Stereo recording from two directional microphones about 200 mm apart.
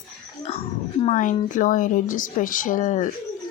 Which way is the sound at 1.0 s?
40° left (ahead or behind).